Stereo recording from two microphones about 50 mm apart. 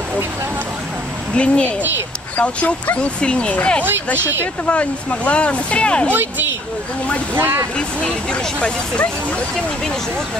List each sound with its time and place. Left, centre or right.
1.3 s speech: left
7.3 s speech: right
7.7 s speech: centre